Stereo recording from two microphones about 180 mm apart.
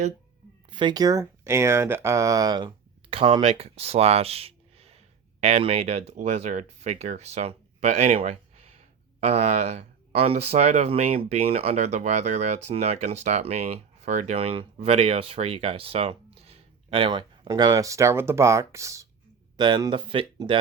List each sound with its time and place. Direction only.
0.7 s speech: 25° right (ahead or behind)